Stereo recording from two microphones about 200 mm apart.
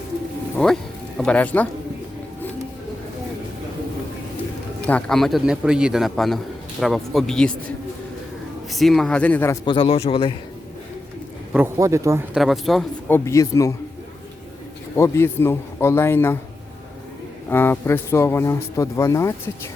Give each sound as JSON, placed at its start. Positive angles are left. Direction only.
{"t": 0.5, "sound": "speech", "side_deg": 0}
{"t": 4.9, "sound": "a man's voice", "side_deg": 5}
{"t": 8.7, "sound": "a man's voice", "side_deg": 0}
{"t": 9.6, "sound": "a man's voice", "side_deg": 25}
{"t": 11.5, "sound": "speech", "side_deg": -10}
{"t": 12.4, "sound": "speech", "side_deg": 0}
{"t": 14.9, "sound": "speech", "side_deg": 15}
{"t": 17.5, "sound": "speech", "side_deg": 10}